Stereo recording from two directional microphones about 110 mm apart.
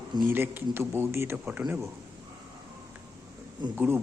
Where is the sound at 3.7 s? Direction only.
20° right (ahead or behind).